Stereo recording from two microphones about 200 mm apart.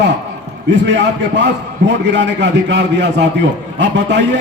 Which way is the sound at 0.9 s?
60° right (ahead or behind).